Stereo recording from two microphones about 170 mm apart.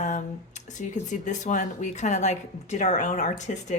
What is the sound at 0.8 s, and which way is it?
A woman's voice, 45° left (ahead or behind).